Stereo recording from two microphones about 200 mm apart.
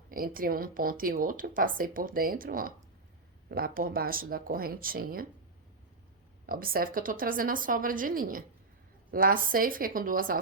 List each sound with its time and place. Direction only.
0.1 s speech: 45° right (ahead or behind)
6.4 s speech: 45° right (ahead or behind)